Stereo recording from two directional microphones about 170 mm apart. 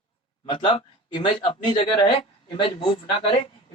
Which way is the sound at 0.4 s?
30° left (ahead or behind).